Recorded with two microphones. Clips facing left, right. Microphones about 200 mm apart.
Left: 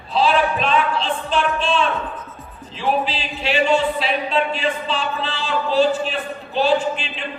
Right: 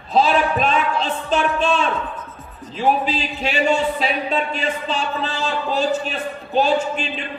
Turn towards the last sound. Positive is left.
turn(degrees=-45)  # may be behind; listen again after turning